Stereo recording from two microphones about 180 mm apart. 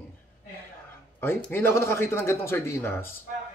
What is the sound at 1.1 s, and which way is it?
A man's voice, 10° left (ahead or behind).